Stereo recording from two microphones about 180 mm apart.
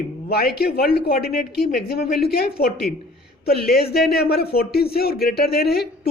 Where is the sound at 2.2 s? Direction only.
60° left (ahead or behind).